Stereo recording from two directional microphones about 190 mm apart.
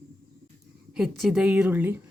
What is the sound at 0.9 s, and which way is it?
A woman's voice, 5° right (ahead or behind).